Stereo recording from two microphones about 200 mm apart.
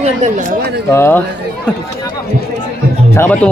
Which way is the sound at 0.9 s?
10° left (ahead or behind).